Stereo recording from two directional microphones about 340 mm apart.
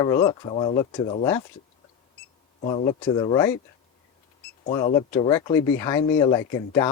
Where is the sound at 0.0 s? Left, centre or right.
Centre.